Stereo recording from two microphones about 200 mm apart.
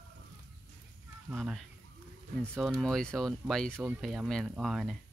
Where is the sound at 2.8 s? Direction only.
5° left (ahead or behind).